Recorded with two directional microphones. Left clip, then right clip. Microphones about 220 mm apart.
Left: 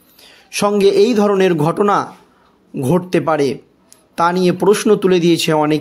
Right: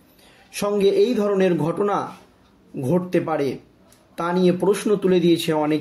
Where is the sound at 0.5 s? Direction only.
40° left (ahead or behind).